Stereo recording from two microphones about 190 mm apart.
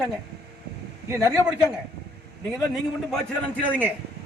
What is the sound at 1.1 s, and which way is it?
Speech, 15° right (ahead or behind).